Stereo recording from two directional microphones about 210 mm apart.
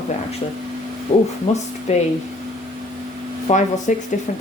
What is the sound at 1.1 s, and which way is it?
Speech, 30° left (ahead or behind).